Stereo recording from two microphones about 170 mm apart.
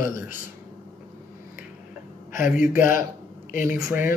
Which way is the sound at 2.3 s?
50° left (ahead or behind).